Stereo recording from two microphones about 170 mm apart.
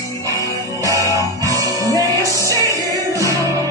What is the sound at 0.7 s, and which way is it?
Music, 20° left (ahead or behind).